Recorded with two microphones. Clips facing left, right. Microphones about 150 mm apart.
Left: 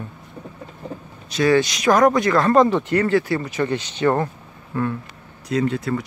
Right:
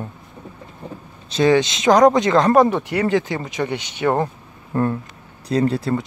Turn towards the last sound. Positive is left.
turn(degrees=-35)  # may be behind; listen again after turning